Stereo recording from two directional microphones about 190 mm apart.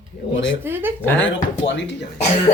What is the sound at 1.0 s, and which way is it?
Speech, 10° left (ahead or behind).